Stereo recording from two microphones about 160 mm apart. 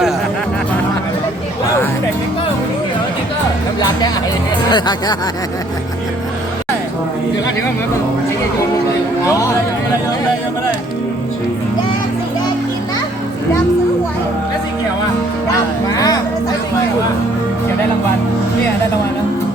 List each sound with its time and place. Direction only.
3.8 s music: 25° left (ahead or behind)
4.7 s speech: 25° left (ahead or behind)
15.9 s a sound: 20° left (ahead or behind)